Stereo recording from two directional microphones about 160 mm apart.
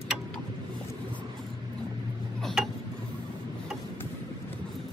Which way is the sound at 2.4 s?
Centre (ahead or behind).